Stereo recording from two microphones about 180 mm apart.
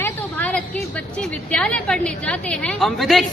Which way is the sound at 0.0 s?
10° left (ahead or behind).